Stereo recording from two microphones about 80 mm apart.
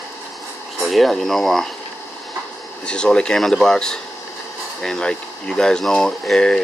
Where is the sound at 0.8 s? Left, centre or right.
Centre.